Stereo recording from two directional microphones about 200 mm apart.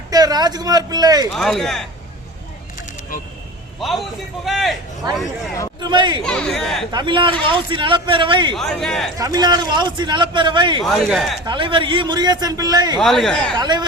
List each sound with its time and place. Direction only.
0.1 s speech: 20° right (ahead or behind)
1.3 s speech: centre (ahead or behind)
3.8 s a man's voice: centre (ahead or behind)
5.8 s a man's voice: 25° right (ahead or behind)
6.2 s speech: 5° left (ahead or behind)
6.9 s a man's voice: 25° right (ahead or behind)
8.5 s speech: centre (ahead or behind)
9.1 s a man's voice: 15° right (ahead or behind)
10.8 s speech: centre (ahead or behind)
11.4 s a man's voice: 25° right (ahead or behind)
13.0 s speech: centre (ahead or behind)
13.6 s a man's voice: 20° right (ahead or behind)